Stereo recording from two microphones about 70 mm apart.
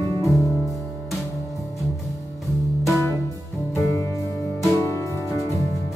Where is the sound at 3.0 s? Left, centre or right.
Left.